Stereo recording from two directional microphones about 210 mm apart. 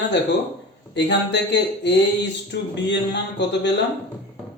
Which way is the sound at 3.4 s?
55° left (ahead or behind).